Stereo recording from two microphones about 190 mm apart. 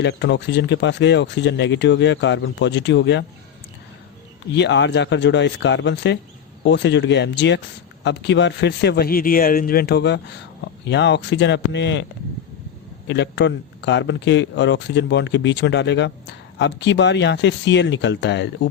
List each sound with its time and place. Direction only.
0.0 s speech: 65° left (ahead or behind)
4.5 s a man's voice: 65° left (ahead or behind)
13.1 s a man's voice: 65° left (ahead or behind)